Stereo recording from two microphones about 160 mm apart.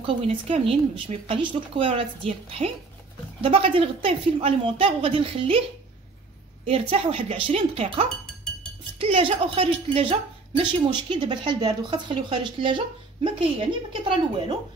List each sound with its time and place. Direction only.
0.0 s a woman's voice: 35° right (ahead or behind)
6.6 s a woman's voice: 35° right (ahead or behind)